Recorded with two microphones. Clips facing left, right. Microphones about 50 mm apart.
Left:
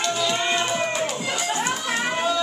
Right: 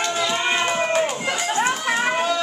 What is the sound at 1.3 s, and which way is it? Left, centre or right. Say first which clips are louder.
Children playing: right 4 dB; right.